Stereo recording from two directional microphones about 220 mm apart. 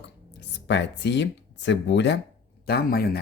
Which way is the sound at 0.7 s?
50° left (ahead or behind).